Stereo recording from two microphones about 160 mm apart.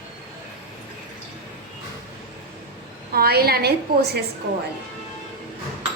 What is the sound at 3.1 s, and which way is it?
A woman's voice, 75° right (ahead or behind).